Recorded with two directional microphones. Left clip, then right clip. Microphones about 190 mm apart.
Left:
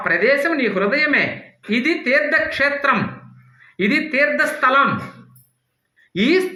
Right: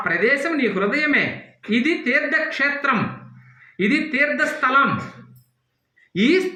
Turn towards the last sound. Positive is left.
turn(degrees=30)  # may be behind; listen again after turning